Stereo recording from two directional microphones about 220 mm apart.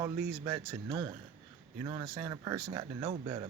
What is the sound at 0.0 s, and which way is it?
Speech, 15° right (ahead or behind).